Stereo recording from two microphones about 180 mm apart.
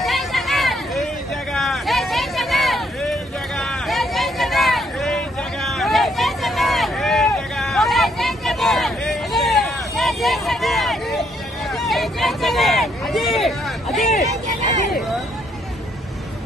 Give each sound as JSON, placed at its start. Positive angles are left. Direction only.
{"t": 0.0, "sound": "hubbub", "side_deg": 0}
{"t": 1.5, "sound": "vehicle", "side_deg": 0}
{"t": 11.7, "sound": "a sound", "side_deg": 0}
{"t": 14.0, "sound": "speech", "side_deg": 40}